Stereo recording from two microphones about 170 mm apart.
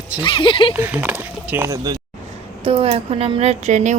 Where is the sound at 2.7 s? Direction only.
35° right (ahead or behind).